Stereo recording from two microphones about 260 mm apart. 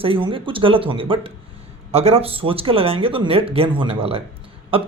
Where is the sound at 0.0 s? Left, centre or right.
Centre.